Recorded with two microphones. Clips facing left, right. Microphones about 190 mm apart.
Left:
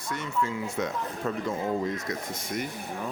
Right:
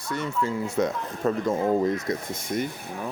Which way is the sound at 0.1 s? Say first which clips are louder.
Right 3 dB; 35° right (ahead or behind).